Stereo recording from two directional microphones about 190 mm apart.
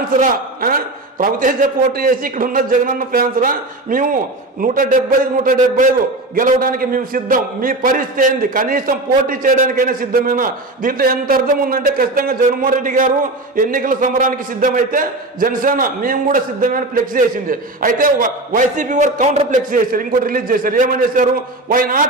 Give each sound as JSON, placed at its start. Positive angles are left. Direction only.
{"t": 0.2, "sound": "a man's voice", "side_deg": -50}